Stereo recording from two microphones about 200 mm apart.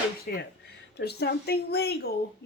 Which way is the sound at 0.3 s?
50° left (ahead or behind).